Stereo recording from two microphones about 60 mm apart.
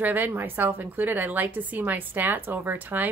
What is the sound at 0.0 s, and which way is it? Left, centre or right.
A woman's voice, right.